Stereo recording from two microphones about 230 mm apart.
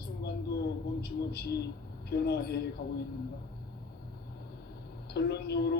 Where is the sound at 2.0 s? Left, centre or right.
Left.